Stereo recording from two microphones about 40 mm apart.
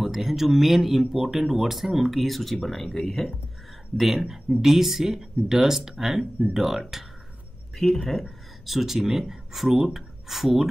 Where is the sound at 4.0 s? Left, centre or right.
Centre.